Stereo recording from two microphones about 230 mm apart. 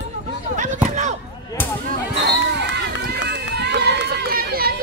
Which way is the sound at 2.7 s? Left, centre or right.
Right.